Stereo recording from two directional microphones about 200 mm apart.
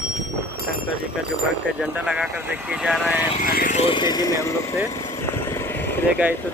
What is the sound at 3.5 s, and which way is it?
Speech, 45° left (ahead or behind).